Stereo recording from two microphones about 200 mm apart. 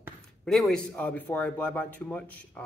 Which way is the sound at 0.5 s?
Centre (ahead or behind).